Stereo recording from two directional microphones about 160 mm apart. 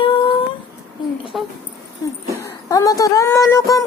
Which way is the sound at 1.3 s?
Centre (ahead or behind).